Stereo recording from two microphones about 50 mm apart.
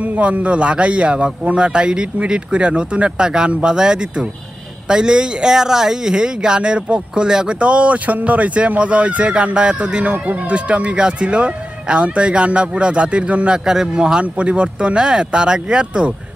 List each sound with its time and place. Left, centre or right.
0.0 s speech: right